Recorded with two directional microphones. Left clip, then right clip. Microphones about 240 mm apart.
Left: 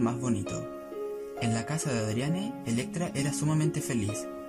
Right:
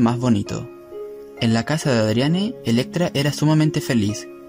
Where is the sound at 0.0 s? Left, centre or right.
Right.